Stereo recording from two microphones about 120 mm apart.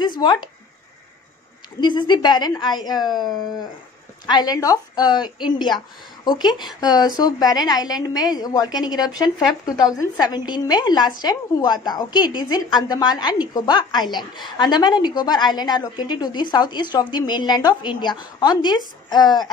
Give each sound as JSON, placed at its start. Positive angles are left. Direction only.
{"t": 0.0, "sound": "speech", "side_deg": 40}
{"t": 1.8, "sound": "a woman's voice", "side_deg": 40}
{"t": 9.2, "sound": "speech", "side_deg": -5}
{"t": 9.9, "sound": "a woman's voice", "side_deg": 35}